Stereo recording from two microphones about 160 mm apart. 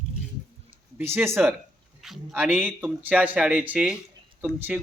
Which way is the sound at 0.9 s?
15° right (ahead or behind).